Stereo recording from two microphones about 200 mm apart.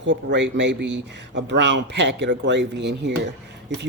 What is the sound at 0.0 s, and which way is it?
Speech, 65° right (ahead or behind).